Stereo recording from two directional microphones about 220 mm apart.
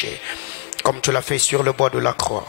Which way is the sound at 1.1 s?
15° left (ahead or behind).